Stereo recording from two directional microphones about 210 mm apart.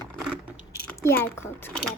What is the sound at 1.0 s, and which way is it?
Speech, 10° left (ahead or behind).